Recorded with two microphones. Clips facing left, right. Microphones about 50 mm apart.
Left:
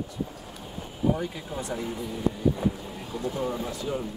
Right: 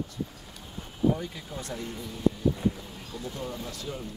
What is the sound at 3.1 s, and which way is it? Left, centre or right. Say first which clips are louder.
Speech: left 7 dB; centre.